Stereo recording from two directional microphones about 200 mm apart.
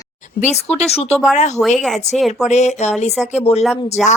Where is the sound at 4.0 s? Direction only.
Centre (ahead or behind).